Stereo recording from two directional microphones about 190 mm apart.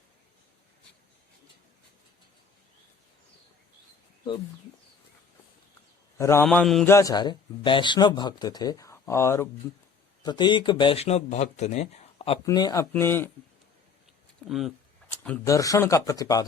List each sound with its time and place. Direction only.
6.1 s a man's voice: 15° left (ahead or behind)
6.8 s speech: 15° left (ahead or behind); by 12.4 s 35° left (ahead or behind)
12.5 s speech: 20° left (ahead or behind)
14.4 s speech: centre (ahead or behind)
15.2 s speech: 10° left (ahead or behind)